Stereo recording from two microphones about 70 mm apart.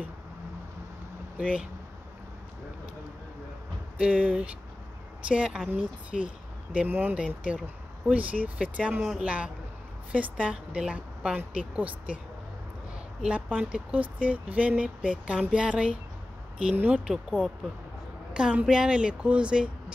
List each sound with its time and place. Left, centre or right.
1.4 s speech: centre
4.0 s speech: centre
6.9 s a woman's voice: right
7.2 s a woman's voice: centre
13.5 s speech: centre